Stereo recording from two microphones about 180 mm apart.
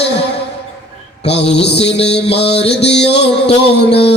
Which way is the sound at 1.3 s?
70° left (ahead or behind).